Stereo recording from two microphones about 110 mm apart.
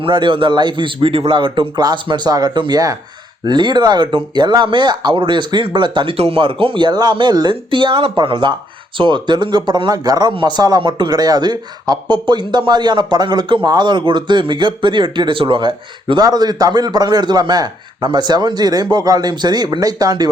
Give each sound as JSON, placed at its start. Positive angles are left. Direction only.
{"t": 0.0, "sound": "a man's voice", "side_deg": -50}